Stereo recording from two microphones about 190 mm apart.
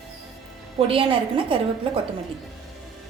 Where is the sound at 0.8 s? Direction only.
30° right (ahead or behind).